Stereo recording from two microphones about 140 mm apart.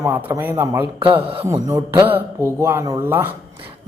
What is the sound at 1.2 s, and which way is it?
Speech, 40° right (ahead or behind).